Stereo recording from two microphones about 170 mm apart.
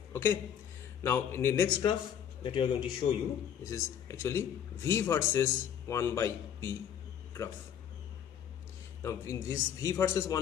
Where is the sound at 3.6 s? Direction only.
15° left (ahead or behind).